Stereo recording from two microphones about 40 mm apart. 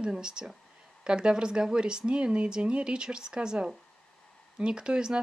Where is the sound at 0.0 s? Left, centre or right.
Right.